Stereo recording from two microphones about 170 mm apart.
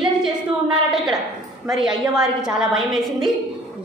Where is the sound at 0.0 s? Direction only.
5° right (ahead or behind).